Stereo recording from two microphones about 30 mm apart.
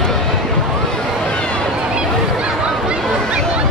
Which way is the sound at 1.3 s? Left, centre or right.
Left.